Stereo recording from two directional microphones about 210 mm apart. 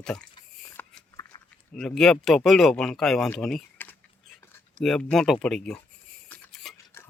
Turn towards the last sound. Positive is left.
turn(degrees=0)  # may be behind; listen again after turning